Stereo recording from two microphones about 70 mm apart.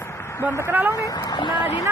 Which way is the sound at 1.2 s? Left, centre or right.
Left.